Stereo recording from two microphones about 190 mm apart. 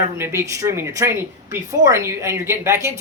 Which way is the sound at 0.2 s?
15° right (ahead or behind).